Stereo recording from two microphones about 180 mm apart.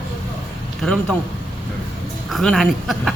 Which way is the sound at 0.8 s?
5° left (ahead or behind).